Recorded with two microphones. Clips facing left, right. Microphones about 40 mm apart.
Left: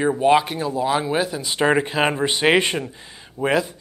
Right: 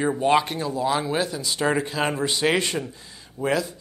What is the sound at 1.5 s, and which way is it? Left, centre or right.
Speech, left.